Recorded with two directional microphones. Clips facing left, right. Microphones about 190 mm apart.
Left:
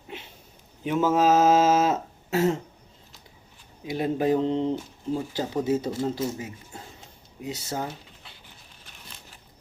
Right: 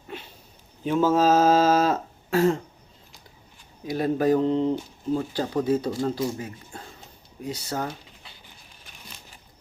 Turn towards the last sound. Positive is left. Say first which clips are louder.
# right 1 dB
turn(degrees=20)  # may be behind; listen again after turning